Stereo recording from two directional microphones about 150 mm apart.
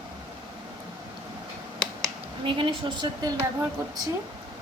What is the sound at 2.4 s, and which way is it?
Speech, 35° right (ahead or behind).